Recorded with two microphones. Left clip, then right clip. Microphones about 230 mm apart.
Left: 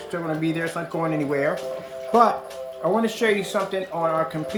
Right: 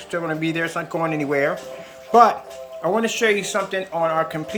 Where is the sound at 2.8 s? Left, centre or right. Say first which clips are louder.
Right 2 dB; centre.